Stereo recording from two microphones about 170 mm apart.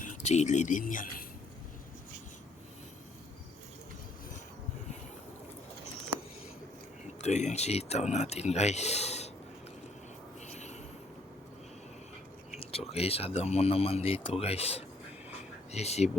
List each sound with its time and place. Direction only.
0.0 s speech: 45° left (ahead or behind)
7.2 s speech: 45° left (ahead or behind)
10.5 s a sound: 40° left (ahead or behind)
12.9 s speech: 35° left (ahead or behind)